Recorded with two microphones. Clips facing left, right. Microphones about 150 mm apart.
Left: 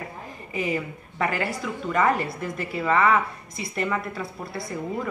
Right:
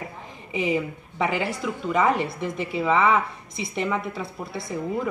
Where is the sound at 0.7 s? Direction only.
5° right (ahead or behind).